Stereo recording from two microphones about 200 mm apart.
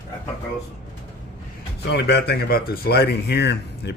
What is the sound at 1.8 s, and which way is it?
Speech, 55° left (ahead or behind).